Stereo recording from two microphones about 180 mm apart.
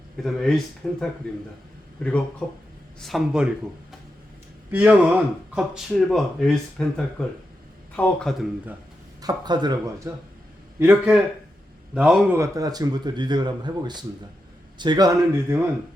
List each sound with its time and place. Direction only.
0.2 s speech: centre (ahead or behind)
2.4 s speech: 10° left (ahead or behind)
4.7 s speech: 10° right (ahead or behind)
9.2 s speech: 25° right (ahead or behind)
10.8 s speech: 10° right (ahead or behind)
12.4 s speech: 20° right (ahead or behind)